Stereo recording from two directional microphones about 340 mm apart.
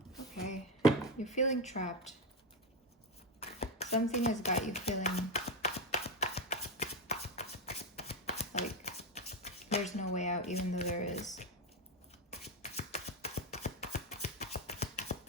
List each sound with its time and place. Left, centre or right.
1.2 s speech: left
3.4 s a sound: centre
12.3 s shuffling cards: centre